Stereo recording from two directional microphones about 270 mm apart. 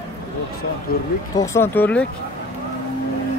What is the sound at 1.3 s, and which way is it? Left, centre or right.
Speech, centre.